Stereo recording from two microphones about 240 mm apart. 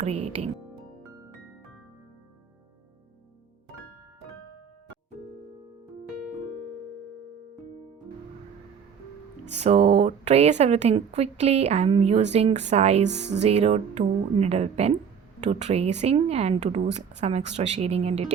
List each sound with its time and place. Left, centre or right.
0.0 s speech: right
9.5 s speech: right